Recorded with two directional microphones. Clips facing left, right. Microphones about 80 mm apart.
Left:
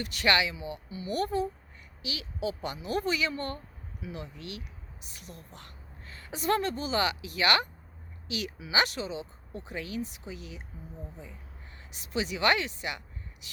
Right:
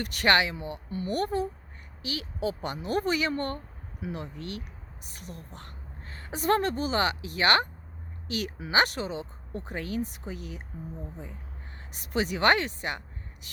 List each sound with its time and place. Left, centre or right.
0.0 s a woman's voice: right
11.9 s speech: right